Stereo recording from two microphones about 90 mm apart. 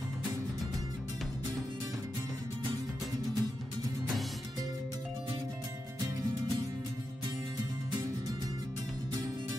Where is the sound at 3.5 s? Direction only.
50° right (ahead or behind).